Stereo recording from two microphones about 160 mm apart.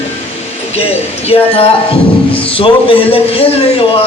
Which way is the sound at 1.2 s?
35° left (ahead or behind).